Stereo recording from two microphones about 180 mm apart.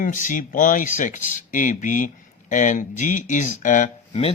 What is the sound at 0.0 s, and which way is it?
Speech, 45° left (ahead or behind).